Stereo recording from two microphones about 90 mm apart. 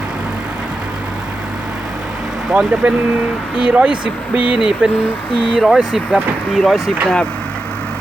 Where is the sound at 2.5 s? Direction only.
20° right (ahead or behind); by 6.8 s centre (ahead or behind).